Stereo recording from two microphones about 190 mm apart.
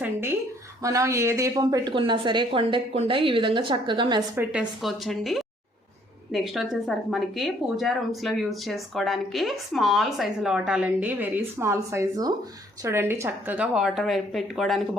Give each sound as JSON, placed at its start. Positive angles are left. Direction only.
{"t": 0.0, "sound": "a sound", "side_deg": -10}
{"t": 0.8, "sound": "a woman's voice", "side_deg": -15}
{"t": 4.4, "sound": "speech", "side_deg": -5}